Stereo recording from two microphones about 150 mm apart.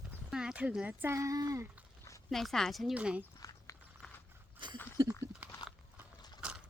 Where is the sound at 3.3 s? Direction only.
25° left (ahead or behind).